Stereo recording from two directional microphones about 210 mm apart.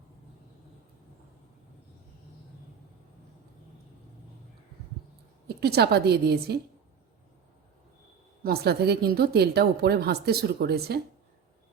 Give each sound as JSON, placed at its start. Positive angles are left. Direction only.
{"t": 5.5, "sound": "a woman's voice", "side_deg": -50}
{"t": 8.4, "sound": "a woman's voice", "side_deg": -50}